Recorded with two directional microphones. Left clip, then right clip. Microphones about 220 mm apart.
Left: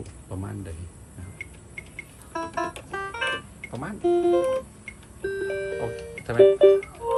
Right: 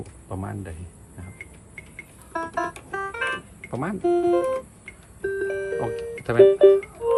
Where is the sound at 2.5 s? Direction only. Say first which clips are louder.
Right 2 dB; 25° left (ahead or behind).